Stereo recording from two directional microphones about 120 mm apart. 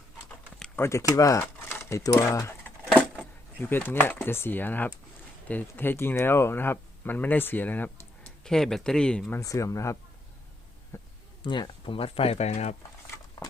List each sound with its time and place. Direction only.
0.8 s speech: 25° left (ahead or behind)
3.6 s speech: 15° left (ahead or behind)
8.5 s speech: 5° left (ahead or behind)
9.4 s speech: 25° left (ahead or behind)
10.9 s a sound: 25° left (ahead or behind)
11.4 s speech: 40° left (ahead or behind); by 12.7 s 65° left (ahead or behind)